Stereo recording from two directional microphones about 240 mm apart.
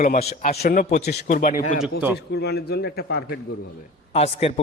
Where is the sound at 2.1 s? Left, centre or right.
Left.